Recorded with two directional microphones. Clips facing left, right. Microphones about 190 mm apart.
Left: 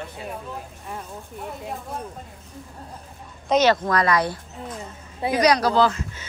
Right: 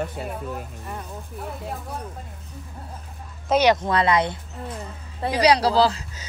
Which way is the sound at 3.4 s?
10° right (ahead or behind).